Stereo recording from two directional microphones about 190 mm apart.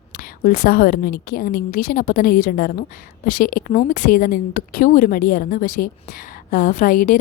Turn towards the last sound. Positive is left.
turn(degrees=45)  # may be behind; listen again after turning